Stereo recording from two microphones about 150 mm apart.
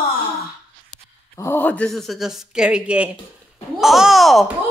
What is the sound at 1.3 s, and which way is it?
Speech, 15° left (ahead or behind).